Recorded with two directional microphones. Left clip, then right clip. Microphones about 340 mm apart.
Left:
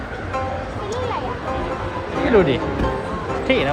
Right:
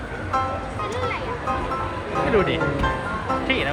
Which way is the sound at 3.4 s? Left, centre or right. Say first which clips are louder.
Left 7 dB; centre.